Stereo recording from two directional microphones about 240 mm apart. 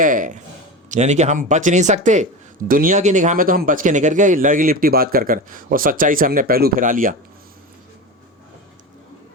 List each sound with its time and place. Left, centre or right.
0.0 s speech: right